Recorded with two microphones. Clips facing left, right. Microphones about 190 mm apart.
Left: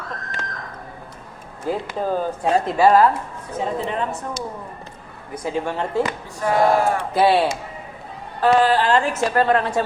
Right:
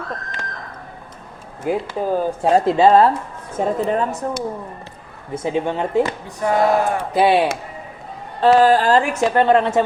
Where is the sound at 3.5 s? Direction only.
45° right (ahead or behind).